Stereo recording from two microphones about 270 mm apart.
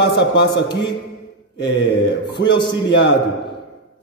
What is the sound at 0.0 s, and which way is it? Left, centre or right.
Speech, left.